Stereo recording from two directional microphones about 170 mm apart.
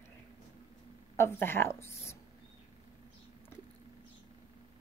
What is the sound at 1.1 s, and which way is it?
A woman's voice, 15° left (ahead or behind).